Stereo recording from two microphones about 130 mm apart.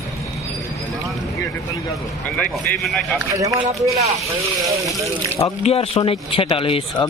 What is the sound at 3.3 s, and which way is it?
Speech, 25° right (ahead or behind).